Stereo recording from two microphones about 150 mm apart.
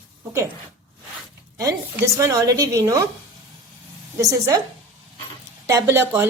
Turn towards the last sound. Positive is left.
turn(degrees=-15)  # may be behind; listen again after turning